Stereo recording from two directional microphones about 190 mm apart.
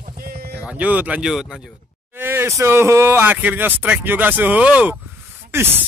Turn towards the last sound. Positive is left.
turn(degrees=-10)  # may be behind; listen again after turning